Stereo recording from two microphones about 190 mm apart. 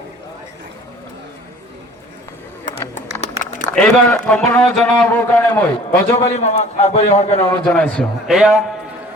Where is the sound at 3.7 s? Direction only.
5° left (ahead or behind).